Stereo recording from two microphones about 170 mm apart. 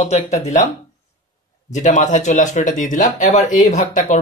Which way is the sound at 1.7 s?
45° left (ahead or behind).